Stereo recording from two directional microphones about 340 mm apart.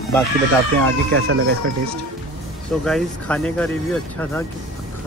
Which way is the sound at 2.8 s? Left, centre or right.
Centre.